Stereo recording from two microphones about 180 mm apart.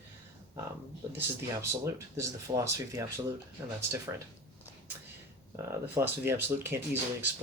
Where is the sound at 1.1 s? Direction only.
15° right (ahead or behind).